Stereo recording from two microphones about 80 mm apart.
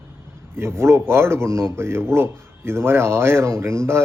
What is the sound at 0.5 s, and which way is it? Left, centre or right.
Speech, right.